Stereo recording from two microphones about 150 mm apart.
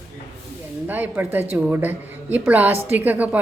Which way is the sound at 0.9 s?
10° right (ahead or behind).